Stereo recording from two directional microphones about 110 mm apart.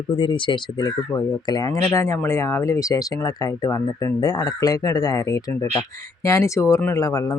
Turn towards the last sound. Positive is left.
turn(degrees=35)  # may be behind; listen again after turning